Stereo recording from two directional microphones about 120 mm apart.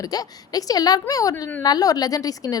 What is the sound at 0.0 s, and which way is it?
A woman's voice, 30° left (ahead or behind).